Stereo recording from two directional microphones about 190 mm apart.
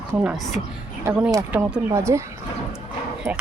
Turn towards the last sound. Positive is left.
turn(degrees=-15)  # may be behind; listen again after turning